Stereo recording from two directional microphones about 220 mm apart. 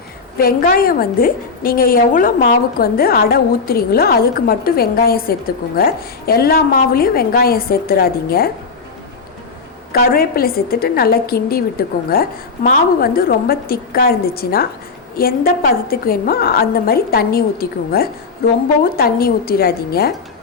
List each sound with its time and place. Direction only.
0.3 s a woman's voice: 40° left (ahead or behind)
9.9 s a woman's voice: 45° left (ahead or behind)